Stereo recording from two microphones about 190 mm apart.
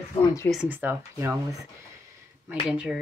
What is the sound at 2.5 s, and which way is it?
Speech, 5° right (ahead or behind).